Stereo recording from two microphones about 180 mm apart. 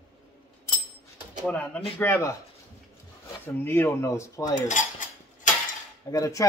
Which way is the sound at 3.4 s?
10° left (ahead or behind).